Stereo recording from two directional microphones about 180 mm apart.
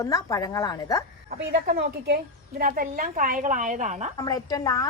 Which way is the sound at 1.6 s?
60° right (ahead or behind).